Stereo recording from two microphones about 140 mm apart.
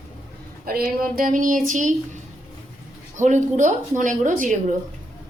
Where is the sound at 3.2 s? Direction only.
60° right (ahead or behind).